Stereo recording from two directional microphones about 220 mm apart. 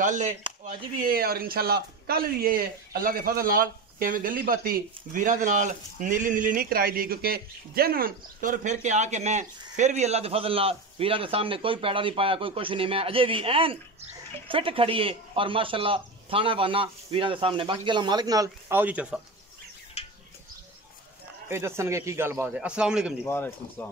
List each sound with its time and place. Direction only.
0.0 s a man's voice: 35° right (ahead or behind); by 19.2 s 5° right (ahead or behind)
20.0 s a sound: 30° left (ahead or behind)
21.5 s a man's voice: 10° right (ahead or behind)
23.2 s speech: 10° left (ahead or behind)